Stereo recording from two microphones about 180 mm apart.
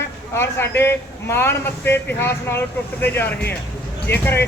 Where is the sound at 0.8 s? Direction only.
15° left (ahead or behind).